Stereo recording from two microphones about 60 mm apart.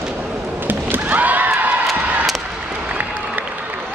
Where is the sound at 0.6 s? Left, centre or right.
Right.